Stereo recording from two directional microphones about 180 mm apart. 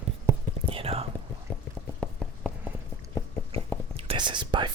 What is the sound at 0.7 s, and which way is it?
Speech, 35° right (ahead or behind).